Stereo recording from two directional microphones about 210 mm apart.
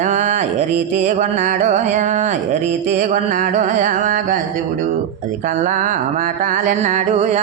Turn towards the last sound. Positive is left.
turn(degrees=-35)  # may be behind; listen again after turning